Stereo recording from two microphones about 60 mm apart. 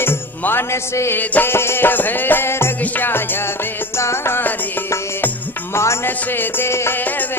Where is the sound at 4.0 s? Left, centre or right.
Left.